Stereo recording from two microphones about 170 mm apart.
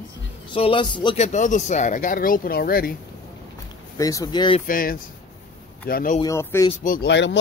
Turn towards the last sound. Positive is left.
turn(degrees=90)